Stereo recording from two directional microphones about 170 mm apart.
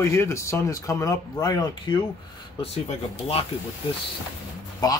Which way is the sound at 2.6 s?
35° left (ahead or behind).